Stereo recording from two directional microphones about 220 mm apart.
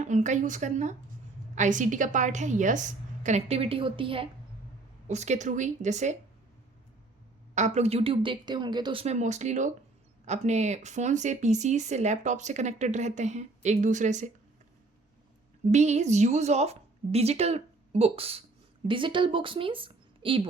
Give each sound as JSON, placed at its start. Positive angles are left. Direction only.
{"t": 0.0, "sound": "speech", "side_deg": -35}
{"t": 7.5, "sound": "a woman's voice", "side_deg": -30}
{"t": 15.6, "sound": "a woman's voice", "side_deg": -30}